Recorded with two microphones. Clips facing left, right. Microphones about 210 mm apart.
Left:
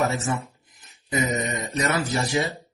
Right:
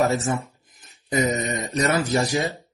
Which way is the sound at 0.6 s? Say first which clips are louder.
Right 1 dB; 40° right (ahead or behind).